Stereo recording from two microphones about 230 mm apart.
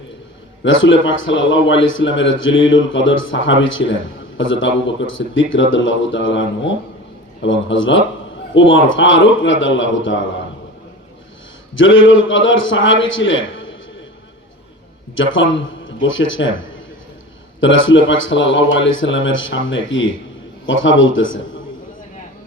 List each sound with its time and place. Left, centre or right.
0.6 s speech: left
11.7 s speech: left
15.1 s a man's voice: left
17.6 s speech: left